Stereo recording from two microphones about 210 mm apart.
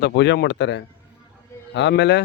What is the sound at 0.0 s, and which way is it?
Speech, 55° left (ahead or behind).